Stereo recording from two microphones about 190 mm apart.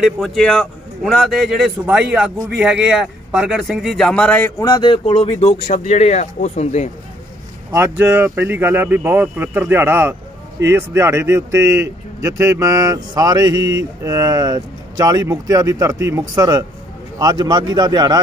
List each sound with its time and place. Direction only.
0.0 s a man's voice: centre (ahead or behind); by 6.9 s 35° left (ahead or behind)
7.7 s speech: 10° right (ahead or behind)